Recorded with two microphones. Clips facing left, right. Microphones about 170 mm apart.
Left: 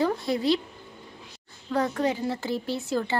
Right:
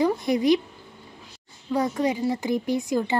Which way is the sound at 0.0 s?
15° right (ahead or behind).